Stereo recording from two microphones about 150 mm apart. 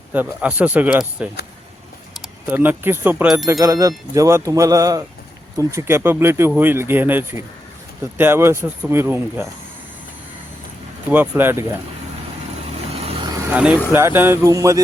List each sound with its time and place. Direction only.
0.1 s speech: 10° right (ahead or behind)
2.5 s speech: 15° right (ahead or behind)
11.1 s speech: 15° right (ahead or behind)
12.7 s vehicle: 40° right (ahead or behind)
13.2 s vehicle: 25° right (ahead or behind)
13.5 s speech: 10° right (ahead or behind)